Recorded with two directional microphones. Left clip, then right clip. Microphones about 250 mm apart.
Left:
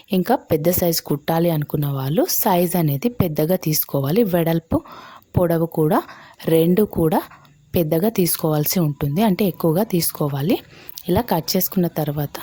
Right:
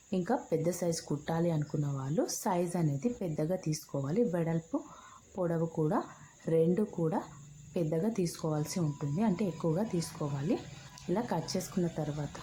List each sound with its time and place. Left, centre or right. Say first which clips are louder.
0.1 s speech: left 13 dB; left